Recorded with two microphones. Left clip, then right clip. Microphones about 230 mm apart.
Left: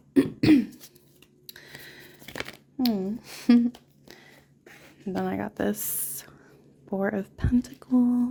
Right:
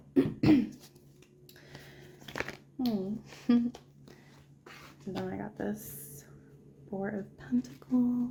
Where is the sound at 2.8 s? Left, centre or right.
Left.